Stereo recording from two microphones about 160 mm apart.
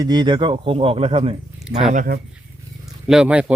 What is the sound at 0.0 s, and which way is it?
Speech, 25° right (ahead or behind).